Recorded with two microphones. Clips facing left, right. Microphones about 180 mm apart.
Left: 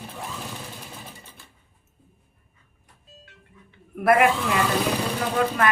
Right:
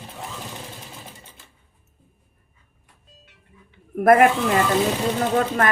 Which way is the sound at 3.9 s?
45° right (ahead or behind).